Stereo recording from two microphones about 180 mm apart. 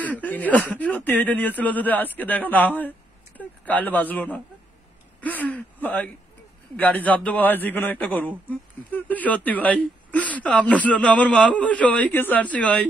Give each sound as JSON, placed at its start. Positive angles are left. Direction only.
{"t": 0.0, "sound": "speech", "side_deg": 10}